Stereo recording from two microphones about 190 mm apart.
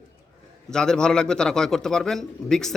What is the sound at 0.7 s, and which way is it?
A man's voice, 5° left (ahead or behind).